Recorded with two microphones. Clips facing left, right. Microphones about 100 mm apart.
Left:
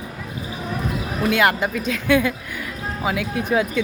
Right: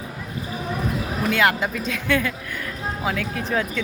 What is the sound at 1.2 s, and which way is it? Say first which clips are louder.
Speech: left 2 dB; 5° left (ahead or behind).